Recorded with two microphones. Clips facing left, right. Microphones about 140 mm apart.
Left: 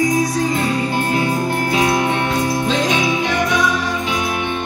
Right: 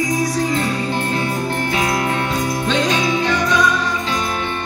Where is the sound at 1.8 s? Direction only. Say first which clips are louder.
Left 3 dB; 20° left (ahead or behind).